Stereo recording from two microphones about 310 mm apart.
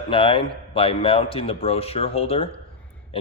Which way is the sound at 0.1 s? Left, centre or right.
Centre.